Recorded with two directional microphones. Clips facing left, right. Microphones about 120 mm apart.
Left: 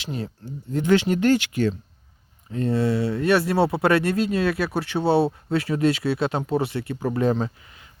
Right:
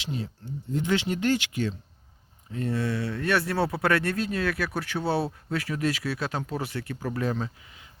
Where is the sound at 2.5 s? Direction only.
35° left (ahead or behind).